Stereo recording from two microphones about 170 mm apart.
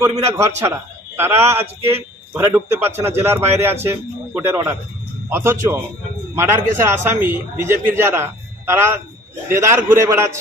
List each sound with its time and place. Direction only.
0.0 s a man's voice: 15° right (ahead or behind)